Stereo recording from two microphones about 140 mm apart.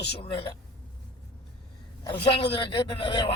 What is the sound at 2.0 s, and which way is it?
Speech, 35° left (ahead or behind).